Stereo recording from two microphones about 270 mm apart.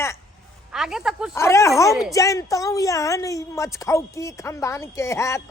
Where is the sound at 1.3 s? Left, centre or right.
Centre.